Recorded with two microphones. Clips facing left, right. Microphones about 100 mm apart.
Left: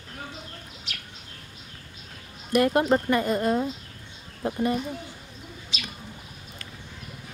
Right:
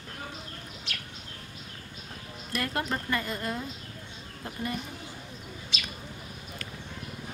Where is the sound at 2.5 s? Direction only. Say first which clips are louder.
Left 11 dB; 20° left (ahead or behind).